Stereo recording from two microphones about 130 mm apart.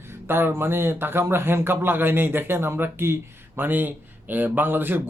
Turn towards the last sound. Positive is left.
turn(degrees=-15)  # may be behind; listen again after turning